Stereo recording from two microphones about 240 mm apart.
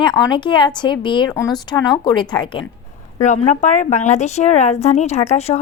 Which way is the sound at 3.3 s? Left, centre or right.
Left.